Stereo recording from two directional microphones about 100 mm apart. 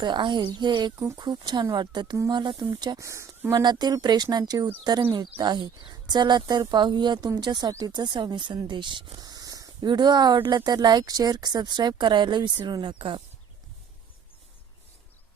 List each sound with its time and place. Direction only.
0.0 s speech: 50° right (ahead or behind)
0.9 s speech: 40° right (ahead or behind)
3.0 s speech: 30° right (ahead or behind)
3.6 s speech: 45° right (ahead or behind)
9.2 s speech: 40° right (ahead or behind); by 13.2 s 60° right (ahead or behind)